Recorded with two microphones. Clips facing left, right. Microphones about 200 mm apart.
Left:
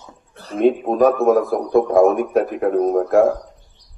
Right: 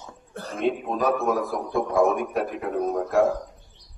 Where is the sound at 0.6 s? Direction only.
50° left (ahead or behind).